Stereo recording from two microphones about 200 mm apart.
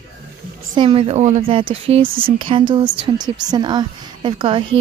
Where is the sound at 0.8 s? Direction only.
30° right (ahead or behind).